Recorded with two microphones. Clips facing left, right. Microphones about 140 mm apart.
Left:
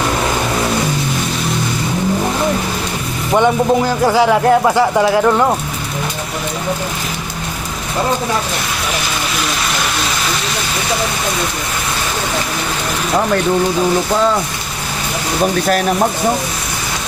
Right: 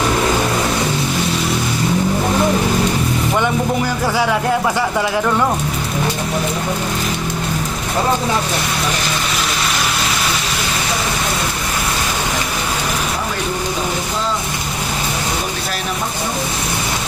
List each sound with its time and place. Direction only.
4.0 s speech: 15° left (ahead or behind)